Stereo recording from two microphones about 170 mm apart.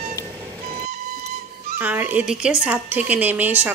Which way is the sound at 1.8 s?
10° right (ahead or behind).